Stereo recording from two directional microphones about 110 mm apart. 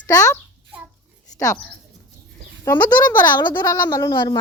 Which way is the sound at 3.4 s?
40° left (ahead or behind).